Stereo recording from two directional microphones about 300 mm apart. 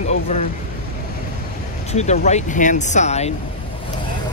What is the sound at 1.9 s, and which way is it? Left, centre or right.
Speech, left.